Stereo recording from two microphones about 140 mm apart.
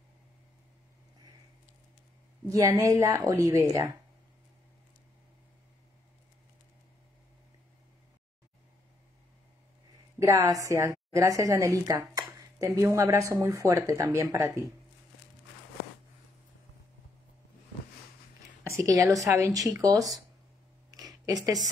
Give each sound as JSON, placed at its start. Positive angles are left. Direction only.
{"t": 2.5, "sound": "a woman's voice", "side_deg": -25}
{"t": 10.1, "sound": "a woman's voice", "side_deg": -20}
{"t": 18.6, "sound": "a woman's voice", "side_deg": -20}
{"t": 21.1, "sound": "a sound", "side_deg": -25}